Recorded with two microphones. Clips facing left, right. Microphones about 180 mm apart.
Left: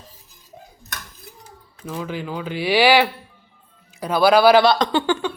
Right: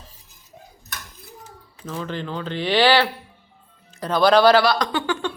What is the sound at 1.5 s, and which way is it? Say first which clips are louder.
Speech: left 2 dB; 10° left (ahead or behind).